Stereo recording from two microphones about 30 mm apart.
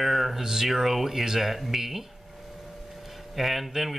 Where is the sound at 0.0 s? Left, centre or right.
Centre.